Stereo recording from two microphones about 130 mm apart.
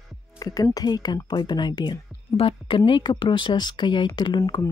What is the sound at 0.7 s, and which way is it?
A woman's voice, 30° left (ahead or behind).